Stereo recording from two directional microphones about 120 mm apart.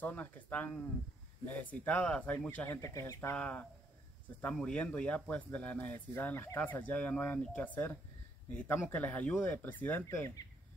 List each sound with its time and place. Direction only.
0.0 s speech: 15° left (ahead or behind)
3.3 s speech: 10° left (ahead or behind)